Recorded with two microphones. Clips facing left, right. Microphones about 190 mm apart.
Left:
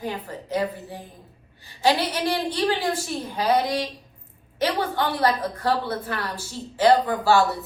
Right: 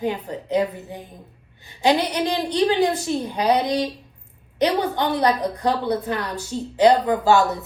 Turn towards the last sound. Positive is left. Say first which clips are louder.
# right 2 dB
turn(degrees=-20)  # may be behind; listen again after turning